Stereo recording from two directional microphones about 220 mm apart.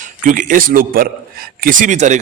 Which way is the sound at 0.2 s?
35° right (ahead or behind).